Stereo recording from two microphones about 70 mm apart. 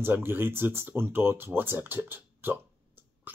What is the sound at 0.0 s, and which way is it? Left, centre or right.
Speech, right.